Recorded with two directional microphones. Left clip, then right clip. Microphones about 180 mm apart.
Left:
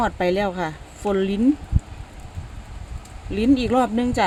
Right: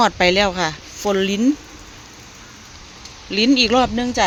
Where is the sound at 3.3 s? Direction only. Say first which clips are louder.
Right 5 dB; 5° right (ahead or behind).